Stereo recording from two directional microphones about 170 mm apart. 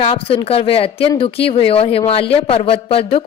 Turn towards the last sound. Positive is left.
turn(degrees=35)  # may be behind; listen again after turning